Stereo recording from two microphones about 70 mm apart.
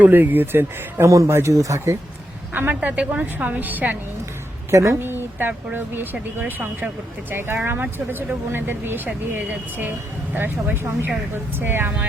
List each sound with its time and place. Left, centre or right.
0.0 s speech: right
1.0 s speech: right
2.5 s speech: right
4.7 s speech: right
4.9 s speech: right